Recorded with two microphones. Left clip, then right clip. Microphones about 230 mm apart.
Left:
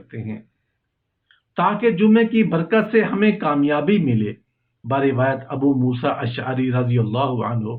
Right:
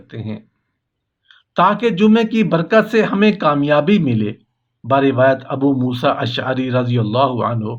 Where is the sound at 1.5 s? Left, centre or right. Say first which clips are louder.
Right 4 dB; right.